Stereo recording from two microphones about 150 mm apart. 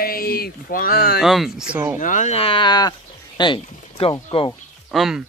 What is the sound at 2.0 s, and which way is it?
Speech, 55° left (ahead or behind).